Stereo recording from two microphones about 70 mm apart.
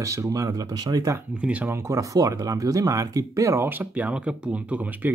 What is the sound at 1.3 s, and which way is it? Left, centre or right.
Speech, centre.